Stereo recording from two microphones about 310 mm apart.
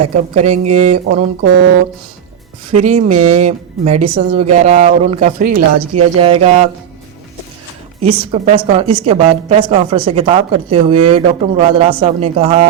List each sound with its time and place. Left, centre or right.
0.0 s speech: right
2.7 s speech: right
5.8 s speech: right
6.1 s speech: centre
8.0 s a woman's voice: centre